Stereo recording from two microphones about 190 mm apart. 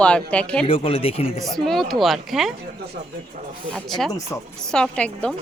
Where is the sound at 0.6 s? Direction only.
30° left (ahead or behind).